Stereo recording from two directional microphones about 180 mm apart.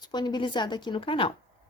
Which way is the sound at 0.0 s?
25° left (ahead or behind).